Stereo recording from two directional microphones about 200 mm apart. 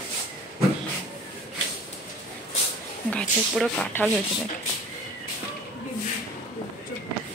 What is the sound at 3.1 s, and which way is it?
Speech, centre (ahead or behind).